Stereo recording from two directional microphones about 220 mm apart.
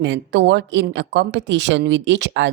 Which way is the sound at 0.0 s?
55° right (ahead or behind).